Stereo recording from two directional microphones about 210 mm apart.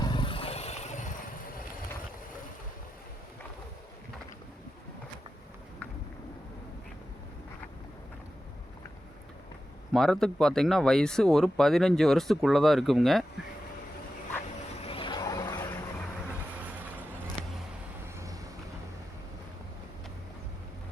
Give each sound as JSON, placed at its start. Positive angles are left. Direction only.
{"t": 0.0, "sound": "vehicle", "side_deg": 20}
{"t": 9.9, "sound": "speech", "side_deg": 0}
{"t": 14.8, "sound": "vehicle", "side_deg": 25}